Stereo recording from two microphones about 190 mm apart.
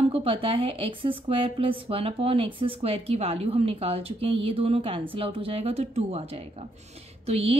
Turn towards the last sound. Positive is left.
turn(degrees=-35)  # may be behind; listen again after turning